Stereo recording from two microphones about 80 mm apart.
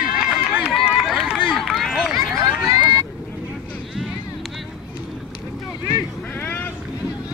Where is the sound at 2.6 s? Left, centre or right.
Right.